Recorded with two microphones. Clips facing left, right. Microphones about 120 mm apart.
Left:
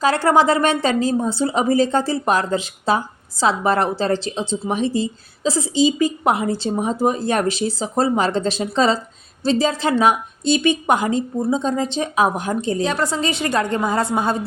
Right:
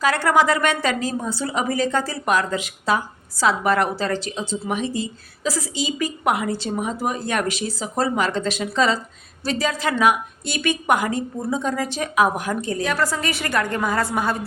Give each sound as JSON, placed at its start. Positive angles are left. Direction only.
{"t": 0.0, "sound": "speech", "side_deg": 30}